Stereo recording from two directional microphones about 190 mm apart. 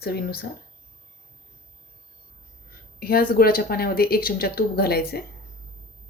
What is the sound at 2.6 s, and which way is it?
Speech, 50° left (ahead or behind).